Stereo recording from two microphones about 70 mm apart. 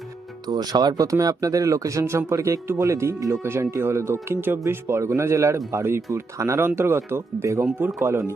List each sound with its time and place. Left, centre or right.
0.4 s speech: right
6.7 s speech: right